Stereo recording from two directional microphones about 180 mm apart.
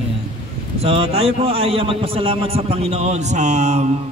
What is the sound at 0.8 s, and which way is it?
A man's voice, 35° right (ahead or behind).